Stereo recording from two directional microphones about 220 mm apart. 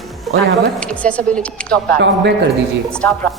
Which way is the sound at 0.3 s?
Centre (ahead or behind).